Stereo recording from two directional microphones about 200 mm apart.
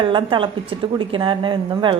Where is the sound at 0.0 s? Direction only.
25° right (ahead or behind).